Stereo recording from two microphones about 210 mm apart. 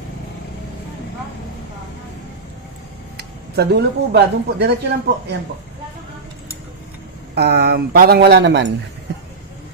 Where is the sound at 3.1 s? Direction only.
50° right (ahead or behind).